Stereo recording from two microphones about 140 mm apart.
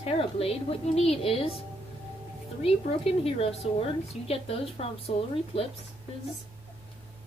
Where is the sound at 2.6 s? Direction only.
45° left (ahead or behind).